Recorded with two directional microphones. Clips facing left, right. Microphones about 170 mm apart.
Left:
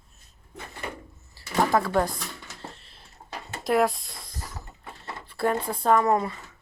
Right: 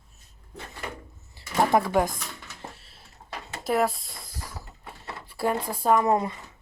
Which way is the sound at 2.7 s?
5° right (ahead or behind).